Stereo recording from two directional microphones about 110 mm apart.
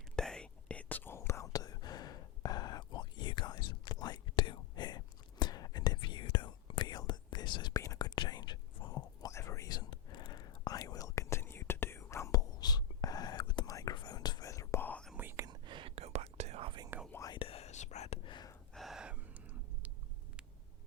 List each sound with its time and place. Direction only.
0.2 s whispering: 5° left (ahead or behind); by 9.3 s 40° left (ahead or behind)
9.3 s whispering: 25° left (ahead or behind)
13.7 s whispering: 30° left (ahead or behind)
15.1 s whispering: 20° right (ahead or behind)
15.4 s whispering: 45° right (ahead or behind)
16.0 s whispering: 70° right (ahead or behind)
16.9 s whispering: 20° right (ahead or behind)
17.3 s whispering: 60° left (ahead or behind); by 18.2 s 85° left
18.3 s gasp: 40° left (ahead or behind)
18.7 s gasp: centre (ahead or behind)